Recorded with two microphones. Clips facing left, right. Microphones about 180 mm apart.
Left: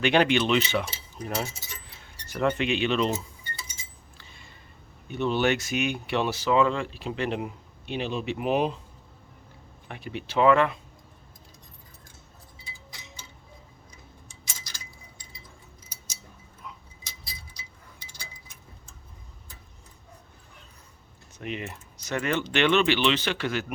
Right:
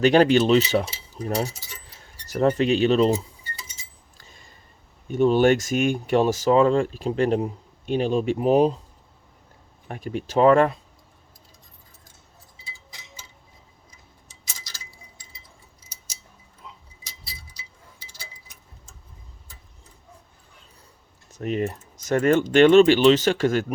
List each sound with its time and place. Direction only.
0.0 s speech: 40° right (ahead or behind)
4.2 s a sound: 40° right (ahead or behind)
5.0 s speech: 45° right (ahead or behind)
9.9 s speech: 45° right (ahead or behind)
16.6 s tick-tock: 25° right (ahead or behind)
21.3 s speech: 40° right (ahead or behind)